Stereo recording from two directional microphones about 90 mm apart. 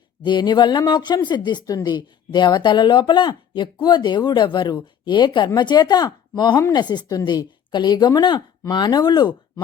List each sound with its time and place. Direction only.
0.2 s speech: 60° left (ahead or behind)